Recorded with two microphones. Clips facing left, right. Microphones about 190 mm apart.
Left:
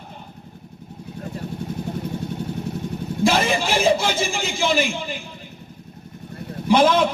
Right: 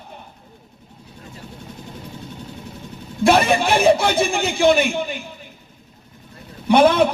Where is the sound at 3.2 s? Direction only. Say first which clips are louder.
Right 4 dB; 65° right (ahead or behind).